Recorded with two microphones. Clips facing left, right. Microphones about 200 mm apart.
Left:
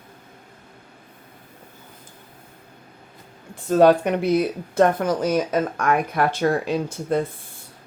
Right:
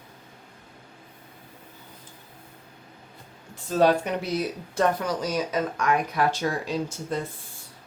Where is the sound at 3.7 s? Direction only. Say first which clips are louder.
Left 6 dB; 55° left (ahead or behind).